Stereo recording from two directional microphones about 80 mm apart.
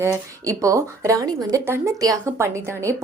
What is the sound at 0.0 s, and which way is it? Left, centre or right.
Speech, right.